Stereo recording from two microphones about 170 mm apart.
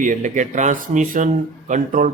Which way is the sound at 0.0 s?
50° right (ahead or behind).